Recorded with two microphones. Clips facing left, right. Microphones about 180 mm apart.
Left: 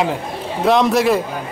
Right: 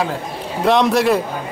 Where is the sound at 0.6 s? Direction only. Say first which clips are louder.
Even; centre (ahead or behind).